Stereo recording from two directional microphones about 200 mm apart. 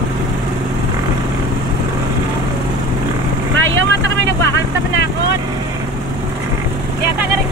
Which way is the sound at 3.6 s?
65° right (ahead or behind).